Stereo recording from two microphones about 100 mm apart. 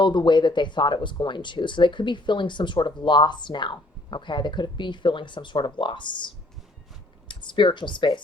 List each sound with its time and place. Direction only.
0.0 s speech: 50° left (ahead or behind)